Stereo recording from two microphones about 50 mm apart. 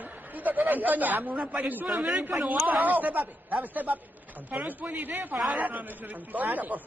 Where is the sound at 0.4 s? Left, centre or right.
Right.